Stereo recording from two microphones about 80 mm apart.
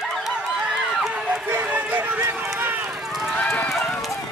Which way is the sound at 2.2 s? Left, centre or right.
Right.